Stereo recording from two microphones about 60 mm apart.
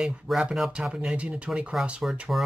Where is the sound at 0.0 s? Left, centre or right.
Centre.